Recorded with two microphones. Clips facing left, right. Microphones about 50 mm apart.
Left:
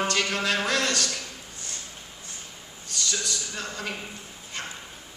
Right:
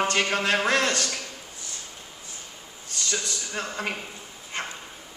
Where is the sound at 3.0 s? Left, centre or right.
Right.